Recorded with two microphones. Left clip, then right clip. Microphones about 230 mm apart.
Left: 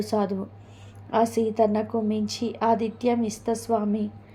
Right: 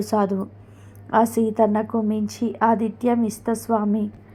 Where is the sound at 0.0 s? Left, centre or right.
Right.